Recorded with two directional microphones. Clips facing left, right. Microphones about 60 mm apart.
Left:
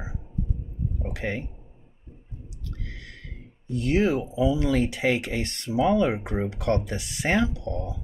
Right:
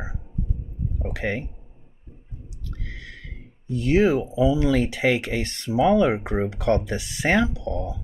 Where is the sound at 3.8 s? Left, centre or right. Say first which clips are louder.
Right 4 dB; right.